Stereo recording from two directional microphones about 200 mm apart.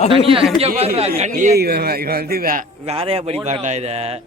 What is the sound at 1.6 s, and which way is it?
A man's voice, 50° right (ahead or behind).